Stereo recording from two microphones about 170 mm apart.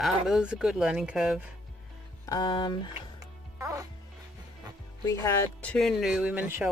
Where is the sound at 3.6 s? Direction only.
20° right (ahead or behind).